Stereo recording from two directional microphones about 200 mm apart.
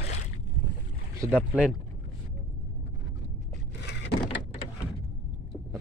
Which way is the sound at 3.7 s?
60° left (ahead or behind).